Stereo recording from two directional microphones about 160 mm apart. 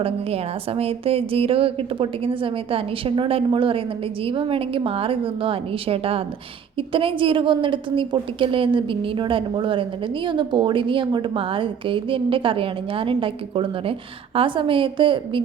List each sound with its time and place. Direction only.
0.0 s a woman's voice: 35° right (ahead or behind)